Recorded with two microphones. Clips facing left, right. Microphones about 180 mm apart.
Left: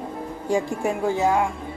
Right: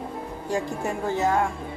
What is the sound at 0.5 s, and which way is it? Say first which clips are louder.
Speech: left 4 dB; 10° left (ahead or behind).